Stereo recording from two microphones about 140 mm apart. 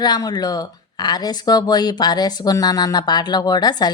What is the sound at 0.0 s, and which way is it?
Speech, 30° left (ahead or behind).